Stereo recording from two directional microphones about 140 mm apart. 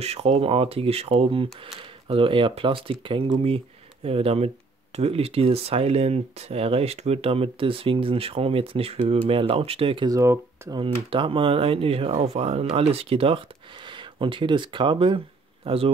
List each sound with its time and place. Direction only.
0.0 s speech: 50° right (ahead or behind)
10.0 s speech: 20° right (ahead or behind)
10.8 s speech: 40° right (ahead or behind)